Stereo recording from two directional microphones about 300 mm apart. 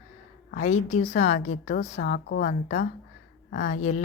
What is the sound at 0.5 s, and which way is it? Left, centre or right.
A woman's voice, left.